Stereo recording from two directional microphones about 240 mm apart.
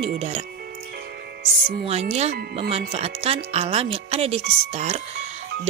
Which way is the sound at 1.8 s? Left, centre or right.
Right.